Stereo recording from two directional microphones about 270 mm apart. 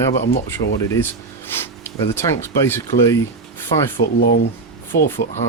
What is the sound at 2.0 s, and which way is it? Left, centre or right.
Speech, centre.